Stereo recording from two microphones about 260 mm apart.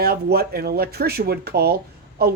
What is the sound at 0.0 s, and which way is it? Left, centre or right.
Speech, right.